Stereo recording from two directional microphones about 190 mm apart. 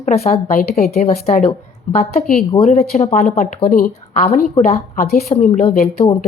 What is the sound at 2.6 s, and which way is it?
Speech, 35° left (ahead or behind).